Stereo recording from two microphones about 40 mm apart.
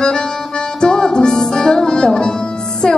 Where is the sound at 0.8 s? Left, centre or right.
Centre.